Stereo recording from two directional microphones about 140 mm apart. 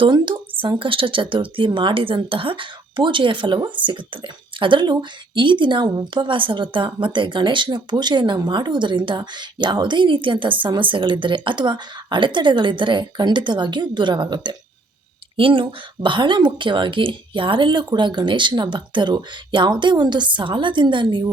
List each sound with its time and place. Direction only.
0.0 s a woman's voice: 35° right (ahead or behind)